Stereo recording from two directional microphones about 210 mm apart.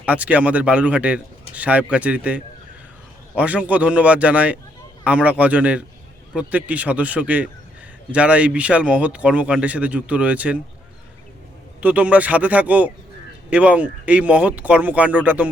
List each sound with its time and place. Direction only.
0.0 s speech: 5° right (ahead or behind)
11.8 s speech: 5° right (ahead or behind)